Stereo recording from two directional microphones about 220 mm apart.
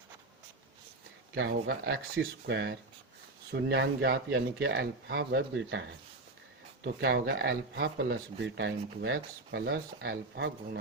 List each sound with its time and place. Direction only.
1.4 s speech: 50° right (ahead or behind)
6.8 s speech: 50° right (ahead or behind)